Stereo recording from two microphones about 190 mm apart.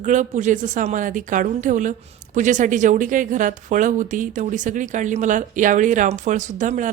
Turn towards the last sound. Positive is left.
turn(degrees=-40)  # may be behind; listen again after turning